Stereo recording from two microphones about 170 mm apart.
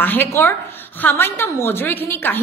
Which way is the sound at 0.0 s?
10° left (ahead or behind).